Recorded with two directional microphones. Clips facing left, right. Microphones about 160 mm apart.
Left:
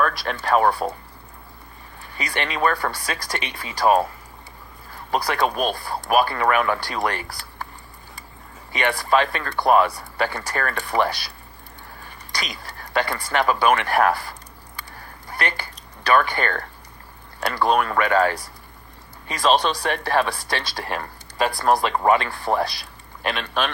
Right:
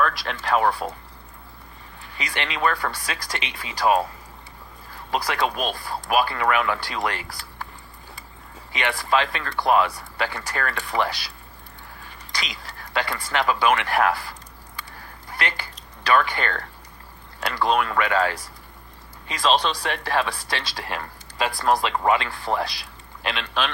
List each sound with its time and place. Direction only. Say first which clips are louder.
0.0 s speech: left 1 dB; 45° left (ahead or behind)
2.1 s speech: left 3 dB; 45° left (ahead or behind)
5.3 s speech: left 3 dB; 45° left (ahead or behind)
8.8 s speech: left 3 dB; 45° left (ahead or behind)
12.9 s speech: left 3 dB; 45° left (ahead or behind)
16.1 s speech: left 2 dB; 45° left (ahead or behind)